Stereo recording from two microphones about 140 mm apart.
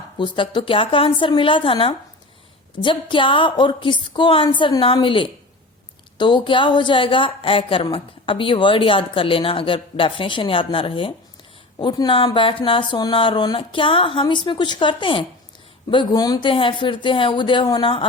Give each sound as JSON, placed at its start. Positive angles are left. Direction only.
{"t": 0.2, "sound": "speech", "side_deg": 35}